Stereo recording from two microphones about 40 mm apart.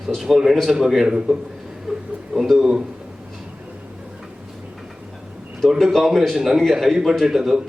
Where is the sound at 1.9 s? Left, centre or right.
Centre.